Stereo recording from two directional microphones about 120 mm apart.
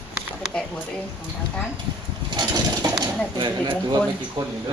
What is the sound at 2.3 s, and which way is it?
Pulleys, 35° right (ahead or behind).